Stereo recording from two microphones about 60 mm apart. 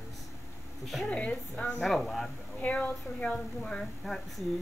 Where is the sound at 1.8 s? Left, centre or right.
Centre.